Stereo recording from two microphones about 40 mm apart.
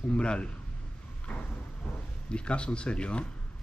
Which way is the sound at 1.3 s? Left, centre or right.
Left.